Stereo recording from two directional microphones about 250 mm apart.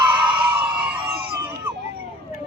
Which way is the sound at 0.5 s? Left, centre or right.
Centre.